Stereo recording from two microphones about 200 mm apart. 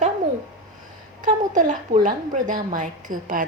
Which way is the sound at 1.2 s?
40° right (ahead or behind).